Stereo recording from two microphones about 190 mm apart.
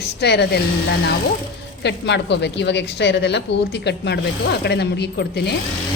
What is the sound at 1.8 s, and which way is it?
Speech, 65° left (ahead or behind).